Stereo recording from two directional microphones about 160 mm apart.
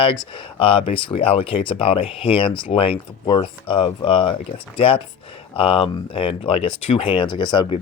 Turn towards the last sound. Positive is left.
turn(degrees=30)  # may be behind; listen again after turning